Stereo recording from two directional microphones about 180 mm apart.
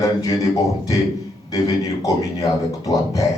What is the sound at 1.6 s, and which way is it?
A man's voice, 20° left (ahead or behind).